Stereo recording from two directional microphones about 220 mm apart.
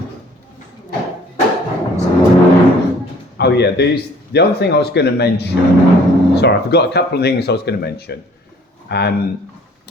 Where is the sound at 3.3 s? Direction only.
50° left (ahead or behind).